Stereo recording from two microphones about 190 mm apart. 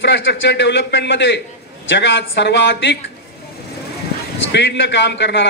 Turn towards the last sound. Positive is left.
turn(degrees=65)  # may be behind; listen again after turning